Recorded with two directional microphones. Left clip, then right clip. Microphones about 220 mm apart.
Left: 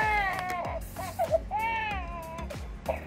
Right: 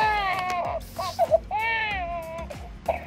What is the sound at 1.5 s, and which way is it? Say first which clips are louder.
Music: right 4 dB; 40° right (ahead or behind).